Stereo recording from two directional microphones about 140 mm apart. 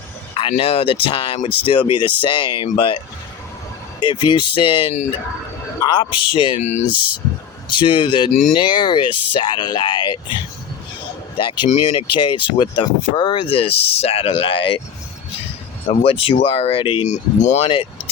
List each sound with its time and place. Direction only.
0.3 s speech: 40° left (ahead or behind)
4.0 s speech: 35° left (ahead or behind)
5.8 s a sound: 30° left (ahead or behind)
6.3 s speech: 35° left (ahead or behind)
6.6 s speech: 55° left (ahead or behind)
7.7 s speech: 35° left (ahead or behind)
8.3 s speech: 55° left (ahead or behind)
8.5 s speech: 35° left (ahead or behind)
15.9 s speech: 40° left (ahead or behind)
17.1 s speech: 55° left (ahead or behind)
17.7 s speech: 40° left (ahead or behind)